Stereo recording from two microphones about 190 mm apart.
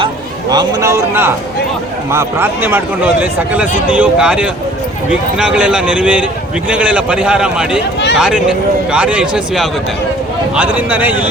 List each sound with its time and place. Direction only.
0.5 s speech: 20° right (ahead or behind)